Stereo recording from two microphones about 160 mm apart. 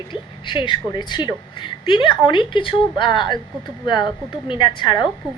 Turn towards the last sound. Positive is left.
turn(degrees=30)  # may be behind; listen again after turning